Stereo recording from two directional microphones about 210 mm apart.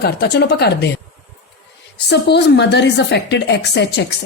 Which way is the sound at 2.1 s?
55° left (ahead or behind).